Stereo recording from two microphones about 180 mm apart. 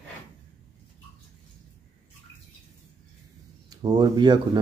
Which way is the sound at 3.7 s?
20° right (ahead or behind).